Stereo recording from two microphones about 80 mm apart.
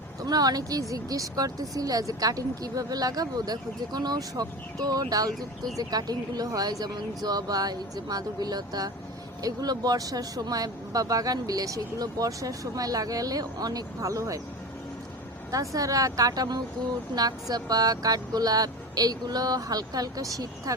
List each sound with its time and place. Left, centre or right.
0.3 s speech: right
15.5 s speech: right